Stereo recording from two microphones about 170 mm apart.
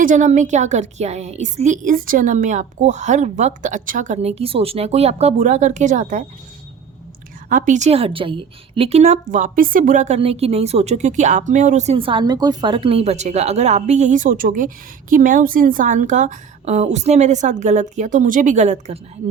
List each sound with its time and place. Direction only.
0.0 s a woman's voice: 50° right (ahead or behind)
7.5 s a woman's voice: 50° right (ahead or behind)
10.2 s a woman's voice: 35° right (ahead or behind)